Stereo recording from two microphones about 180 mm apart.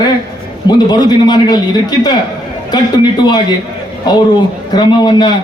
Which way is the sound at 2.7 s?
25° left (ahead or behind).